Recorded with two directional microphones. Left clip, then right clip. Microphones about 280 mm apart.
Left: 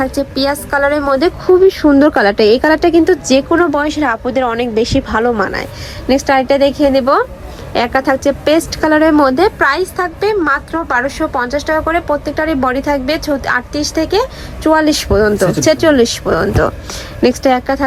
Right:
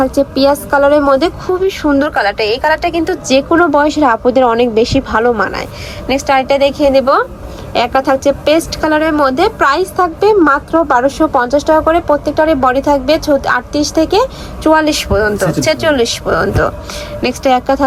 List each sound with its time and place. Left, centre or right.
0.5 s a woman's voice: centre
2.2 s speech: left
2.9 s a woman's voice: centre